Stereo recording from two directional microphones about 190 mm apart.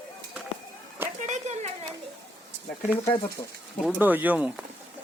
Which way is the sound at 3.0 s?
20° left (ahead or behind).